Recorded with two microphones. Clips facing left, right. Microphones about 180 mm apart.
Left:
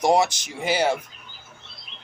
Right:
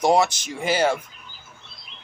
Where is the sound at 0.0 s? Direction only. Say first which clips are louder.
Right 1 dB; 15° left (ahead or behind).